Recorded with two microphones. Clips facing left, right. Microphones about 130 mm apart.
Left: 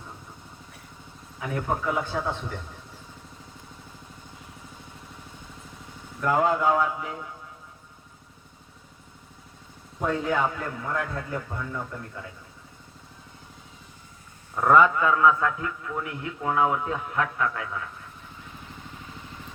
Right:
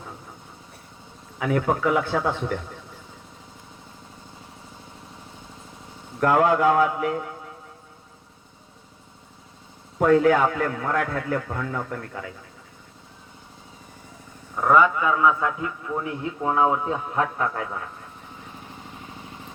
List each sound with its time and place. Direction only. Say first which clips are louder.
1.4 s a man's voice: right 6 dB; 80° right
6.1 s a man's voice: right 4 dB; 70° right (ahead or behind)
10.0 s a man's voice: right 8 dB; 75° right (ahead or behind)
14.6 s a man's voice: even; 5° right (ahead or behind); by 17.8 s 35° right (ahead or behind)